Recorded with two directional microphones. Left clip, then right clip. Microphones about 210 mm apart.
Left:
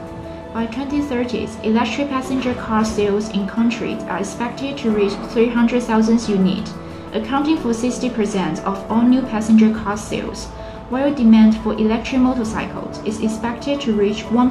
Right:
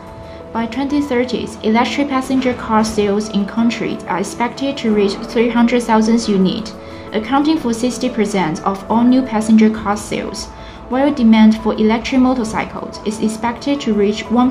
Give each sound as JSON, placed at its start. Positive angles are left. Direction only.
{"t": 0.6, "sound": "a woman's voice", "side_deg": -45}